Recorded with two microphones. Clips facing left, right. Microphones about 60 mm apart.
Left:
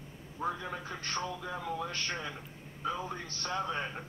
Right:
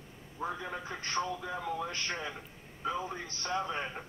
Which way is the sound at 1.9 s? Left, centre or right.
Right.